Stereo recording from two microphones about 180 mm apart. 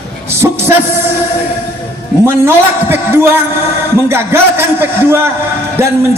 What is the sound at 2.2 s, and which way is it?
A man's voice, 15° right (ahead or behind).